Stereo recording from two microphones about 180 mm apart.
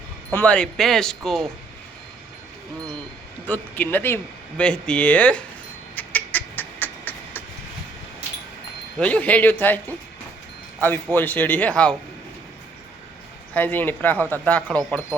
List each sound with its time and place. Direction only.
0.3 s speech: 5° left (ahead or behind)
3.4 s a man's voice: 10° left (ahead or behind)
6.0 s duck: 10° left (ahead or behind)
9.0 s a man's voice: 5° left (ahead or behind)
13.5 s a man's voice: 10° left (ahead or behind)